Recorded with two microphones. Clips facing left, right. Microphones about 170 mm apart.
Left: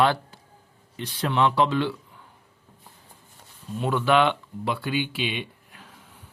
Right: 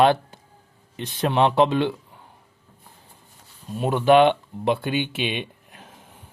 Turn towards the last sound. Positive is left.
turn(degrees=-20)  # may be behind; listen again after turning